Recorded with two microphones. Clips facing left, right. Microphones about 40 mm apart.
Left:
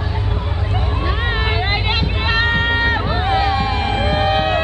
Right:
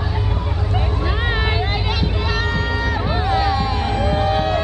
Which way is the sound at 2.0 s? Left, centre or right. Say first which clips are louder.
Left 4 dB; left.